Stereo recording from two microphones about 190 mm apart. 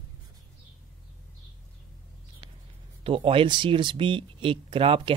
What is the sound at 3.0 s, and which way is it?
Speech, 30° right (ahead or behind).